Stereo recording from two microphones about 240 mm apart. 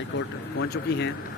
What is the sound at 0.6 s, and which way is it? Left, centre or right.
Speech, left.